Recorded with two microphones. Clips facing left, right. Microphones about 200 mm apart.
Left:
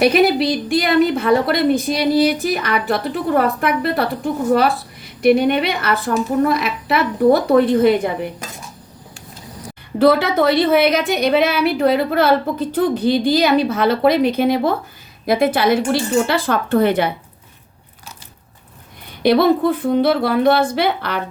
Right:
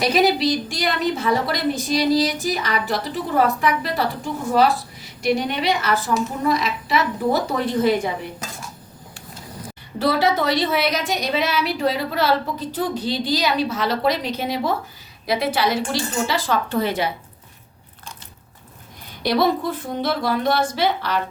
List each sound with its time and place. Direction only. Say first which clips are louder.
0.0 s a woman's voice: left 4 dB; 60° left (ahead or behind)
10.0 s a woman's voice: left 6 dB; 55° left (ahead or behind)
19.2 s a woman's voice: left 6 dB; 55° left (ahead or behind)